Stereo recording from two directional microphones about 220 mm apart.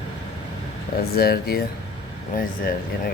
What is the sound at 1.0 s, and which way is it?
Speech, 45° left (ahead or behind).